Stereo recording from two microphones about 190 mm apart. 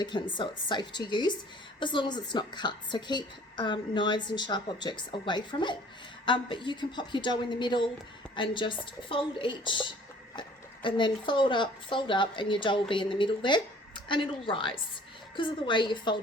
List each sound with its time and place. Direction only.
0.0 s a woman's voice: 25° left (ahead or behind)